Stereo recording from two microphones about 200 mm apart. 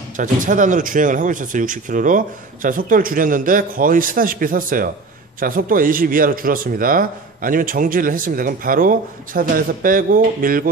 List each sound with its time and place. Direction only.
0.2 s a man's voice: 40° right (ahead or behind)